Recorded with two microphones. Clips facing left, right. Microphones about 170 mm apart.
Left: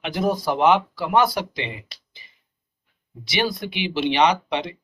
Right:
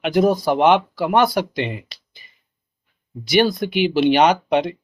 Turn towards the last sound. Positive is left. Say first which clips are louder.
# right 5 dB
turn(degrees=-50)  # may be behind; listen again after turning